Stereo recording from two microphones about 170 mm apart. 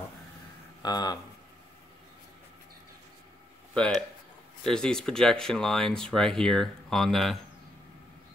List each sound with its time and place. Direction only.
0.8 s speech: 25° left (ahead or behind)
3.7 s speech: 5° left (ahead or behind)